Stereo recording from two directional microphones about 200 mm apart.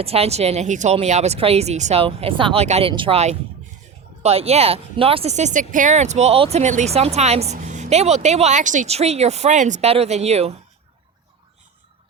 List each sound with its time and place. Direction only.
0.0 s speech: 30° right (ahead or behind)